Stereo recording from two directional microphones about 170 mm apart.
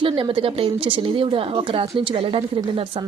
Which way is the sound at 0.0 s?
30° right (ahead or behind).